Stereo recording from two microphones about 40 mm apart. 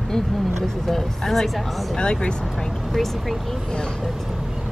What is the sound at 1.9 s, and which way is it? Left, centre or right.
Speech, left.